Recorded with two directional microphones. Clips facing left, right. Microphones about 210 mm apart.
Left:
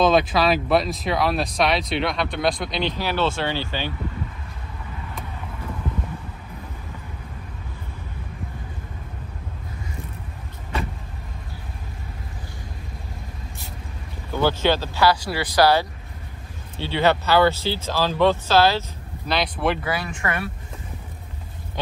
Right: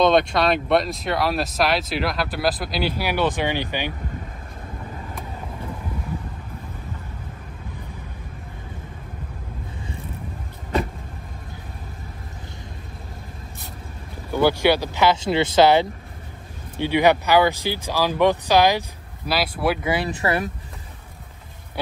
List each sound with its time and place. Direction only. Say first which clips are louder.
0.0 s speech: right 1 dB; centre (ahead or behind); by 3.9 s 15° right (ahead or behind)
14.3 s speech: right 3 dB; 15° right (ahead or behind)
19.8 s speech: right 4 dB; 25° right (ahead or behind)